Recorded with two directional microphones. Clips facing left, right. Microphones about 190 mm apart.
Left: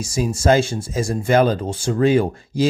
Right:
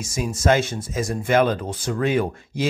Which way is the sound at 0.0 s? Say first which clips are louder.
Left 3 dB; 30° left (ahead or behind).